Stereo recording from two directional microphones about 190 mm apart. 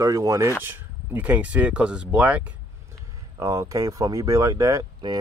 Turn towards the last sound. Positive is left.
turn(degrees=-20)  # may be behind; listen again after turning